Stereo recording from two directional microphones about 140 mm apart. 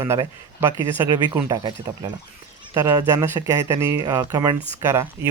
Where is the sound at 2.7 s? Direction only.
25° right (ahead or behind).